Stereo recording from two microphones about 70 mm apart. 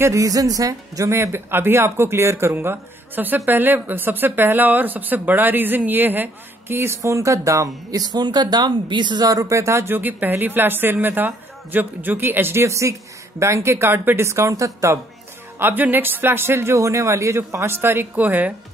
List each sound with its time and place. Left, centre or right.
0.0 s speech: right
1.1 s speech: right
2.5 s a woman's voice: right
7.0 s speech: right
9.9 s speech: right
15.6 s speech: right
18.1 s speech: right